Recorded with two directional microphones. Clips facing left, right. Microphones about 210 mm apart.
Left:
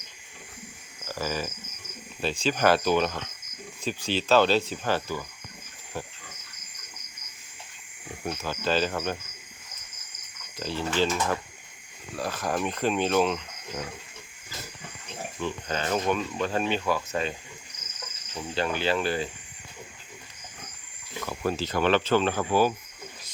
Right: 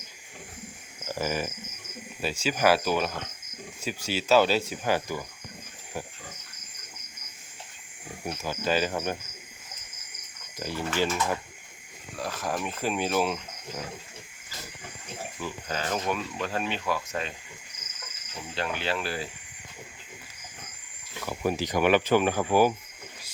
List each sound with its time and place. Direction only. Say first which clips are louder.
1.0 s speech: right 1 dB; 20° right (ahead or behind)
8.3 s speech: even; 10° right (ahead or behind)
10.6 s speech: left 2 dB; 15° right (ahead or behind)
12.2 s speech: left 3 dB; centre (ahead or behind)
15.4 s speech: left 3 dB; 5° right (ahead or behind)
18.5 s speech: left 4 dB; centre (ahead or behind)
21.2 s speech: right 1 dB; 15° right (ahead or behind)